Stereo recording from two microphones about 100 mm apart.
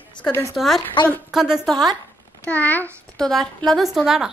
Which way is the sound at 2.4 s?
15° left (ahead or behind).